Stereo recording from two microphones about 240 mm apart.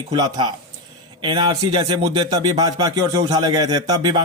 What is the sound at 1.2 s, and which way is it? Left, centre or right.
A man's voice, centre.